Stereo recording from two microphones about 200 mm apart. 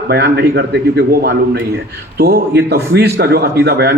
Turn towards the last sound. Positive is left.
turn(degrees=-55)  # may be behind; listen again after turning